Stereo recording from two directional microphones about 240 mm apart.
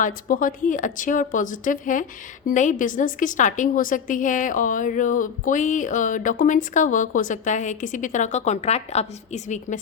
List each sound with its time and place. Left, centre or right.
0.0 s a woman's voice: left